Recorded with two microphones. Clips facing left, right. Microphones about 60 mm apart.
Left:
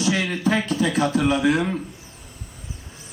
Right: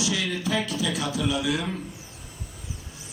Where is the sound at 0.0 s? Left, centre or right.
Left.